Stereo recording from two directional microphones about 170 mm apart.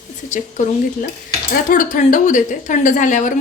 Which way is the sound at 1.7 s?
50° left (ahead or behind).